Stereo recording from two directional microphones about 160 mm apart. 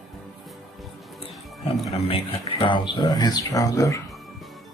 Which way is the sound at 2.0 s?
35° left (ahead or behind).